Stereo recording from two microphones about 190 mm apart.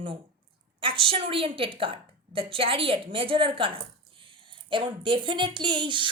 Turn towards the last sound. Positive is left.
turn(degrees=-25)  # may be behind; listen again after turning